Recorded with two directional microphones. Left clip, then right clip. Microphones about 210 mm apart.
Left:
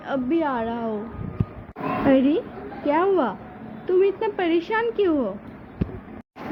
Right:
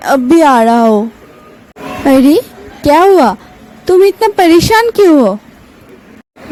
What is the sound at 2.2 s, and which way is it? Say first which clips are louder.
A woman's voice: right 14 dB; 65° right (ahead or behind).